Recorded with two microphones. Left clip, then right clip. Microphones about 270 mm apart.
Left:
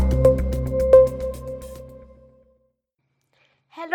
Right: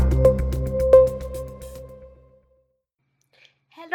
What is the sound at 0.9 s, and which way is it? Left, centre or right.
Music, centre.